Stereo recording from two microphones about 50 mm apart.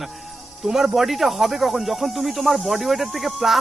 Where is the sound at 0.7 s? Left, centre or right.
Centre.